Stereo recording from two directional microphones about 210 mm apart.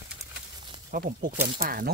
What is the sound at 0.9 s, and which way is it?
Speech, 40° right (ahead or behind).